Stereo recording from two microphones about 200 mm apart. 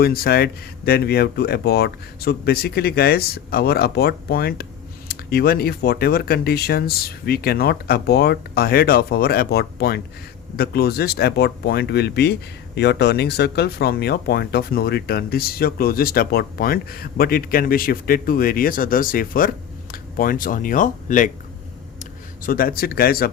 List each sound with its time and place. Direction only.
0.0 s speech: 50° left (ahead or behind)
22.4 s speech: 45° left (ahead or behind)